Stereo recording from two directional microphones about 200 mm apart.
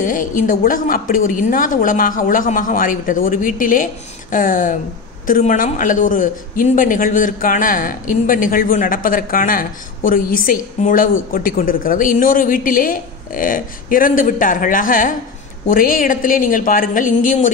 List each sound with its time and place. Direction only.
0.0 s a man's voice: 40° left (ahead or behind)